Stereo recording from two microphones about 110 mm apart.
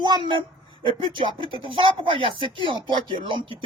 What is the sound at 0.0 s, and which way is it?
Speech, 45° right (ahead or behind).